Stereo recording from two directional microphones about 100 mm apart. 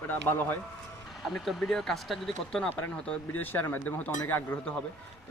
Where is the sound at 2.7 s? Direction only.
20° left (ahead or behind).